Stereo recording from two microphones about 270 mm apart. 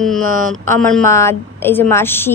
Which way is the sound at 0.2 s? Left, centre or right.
Right.